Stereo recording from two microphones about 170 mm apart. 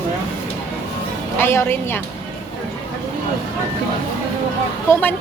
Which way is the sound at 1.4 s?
15° left (ahead or behind).